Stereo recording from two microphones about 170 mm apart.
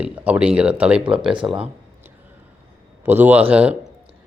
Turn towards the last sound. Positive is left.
turn(degrees=-5)  # may be behind; listen again after turning